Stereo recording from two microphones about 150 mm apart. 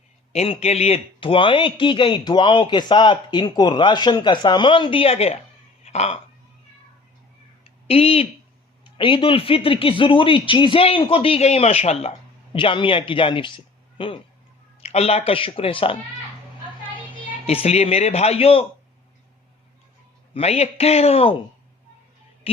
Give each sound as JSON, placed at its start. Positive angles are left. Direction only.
{"t": 0.3, "sound": "speech", "side_deg": 40}
{"t": 5.8, "sound": "a sound", "side_deg": 45}
{"t": 7.6, "sound": "a sound", "side_deg": 40}
{"t": 8.8, "sound": "speech", "side_deg": 30}
{"t": 17.4, "sound": "speech", "side_deg": 40}
{"t": 20.3, "sound": "speech", "side_deg": 45}